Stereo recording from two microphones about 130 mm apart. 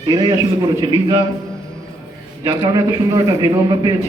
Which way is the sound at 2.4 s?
30° right (ahead or behind).